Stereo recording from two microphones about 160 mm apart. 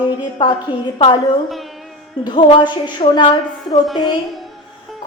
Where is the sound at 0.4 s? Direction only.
30° left (ahead or behind).